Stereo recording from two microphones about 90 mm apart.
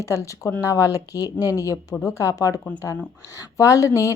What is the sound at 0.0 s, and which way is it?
Speech, 35° left (ahead or behind).